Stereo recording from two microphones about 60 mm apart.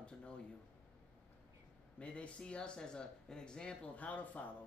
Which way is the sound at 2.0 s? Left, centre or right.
Centre.